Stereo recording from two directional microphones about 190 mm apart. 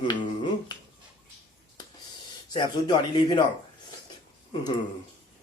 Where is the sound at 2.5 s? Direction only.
25° left (ahead or behind).